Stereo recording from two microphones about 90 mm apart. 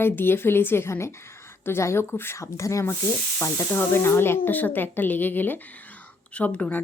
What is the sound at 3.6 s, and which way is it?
Speech, 25° left (ahead or behind).